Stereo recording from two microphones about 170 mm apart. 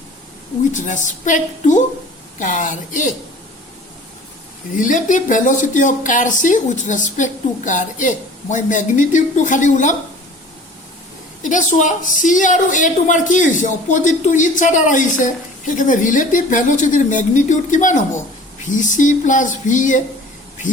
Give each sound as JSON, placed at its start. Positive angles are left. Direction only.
{"t": 0.6, "sound": "a woman's voice", "side_deg": 45}
{"t": 4.8, "sound": "a woman's voice", "side_deg": 50}
{"t": 11.4, "sound": "a woman's voice", "side_deg": 50}